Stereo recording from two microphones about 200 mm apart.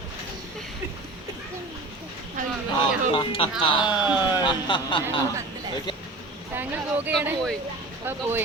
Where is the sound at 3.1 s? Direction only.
25° left (ahead or behind).